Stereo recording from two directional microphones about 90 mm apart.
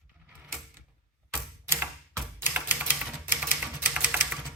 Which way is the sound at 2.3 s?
20° right (ahead or behind).